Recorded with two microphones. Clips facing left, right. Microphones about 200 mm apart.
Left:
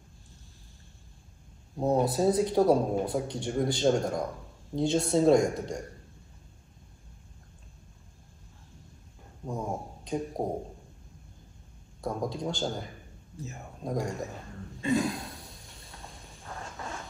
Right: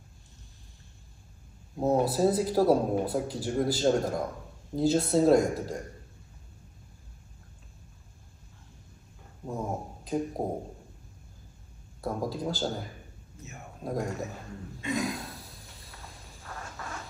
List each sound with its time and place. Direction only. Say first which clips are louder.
1.8 s speech: right 1 dB; 5° right (ahead or behind)
9.4 s speech: even; 5° right (ahead or behind)
12.0 s speech: even; 5° right (ahead or behind)
13.8 s speech: even; 5° right (ahead or behind)
14.8 s a sound: left 4 dB; 30° left (ahead or behind)
15.3 s a sound: even; 5° right (ahead or behind)